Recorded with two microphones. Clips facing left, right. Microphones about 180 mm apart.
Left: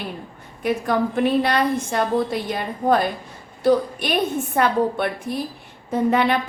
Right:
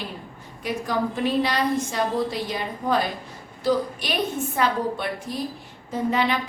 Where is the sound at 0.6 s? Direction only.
55° left (ahead or behind).